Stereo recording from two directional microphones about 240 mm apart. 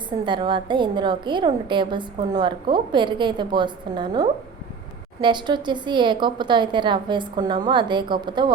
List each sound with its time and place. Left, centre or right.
0.3 s a woman's voice: centre